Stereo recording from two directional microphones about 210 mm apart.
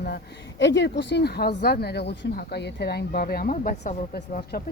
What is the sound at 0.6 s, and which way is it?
A woman's voice, 55° left (ahead or behind).